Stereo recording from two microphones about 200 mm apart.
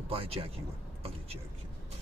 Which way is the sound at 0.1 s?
30° right (ahead or behind).